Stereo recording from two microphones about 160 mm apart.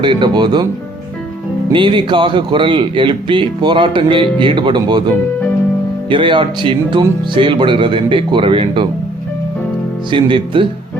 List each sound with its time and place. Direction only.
0.0 s speech: 30° right (ahead or behind)
1.7 s speech: 30° right (ahead or behind)
10.1 s speech: 30° right (ahead or behind)